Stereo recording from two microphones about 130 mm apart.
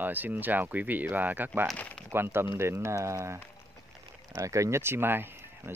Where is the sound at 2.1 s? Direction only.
20° right (ahead or behind).